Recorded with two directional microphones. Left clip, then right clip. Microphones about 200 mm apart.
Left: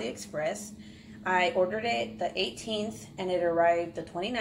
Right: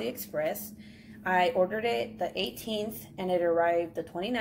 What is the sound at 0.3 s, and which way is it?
Speech, 35° right (ahead or behind).